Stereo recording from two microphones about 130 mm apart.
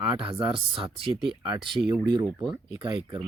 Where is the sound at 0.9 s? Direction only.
40° right (ahead or behind).